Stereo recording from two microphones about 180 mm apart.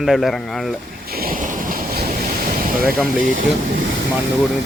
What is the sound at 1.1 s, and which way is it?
Waves, 55° right (ahead or behind).